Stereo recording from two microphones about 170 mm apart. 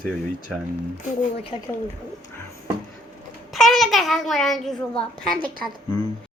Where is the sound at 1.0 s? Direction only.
45° left (ahead or behind).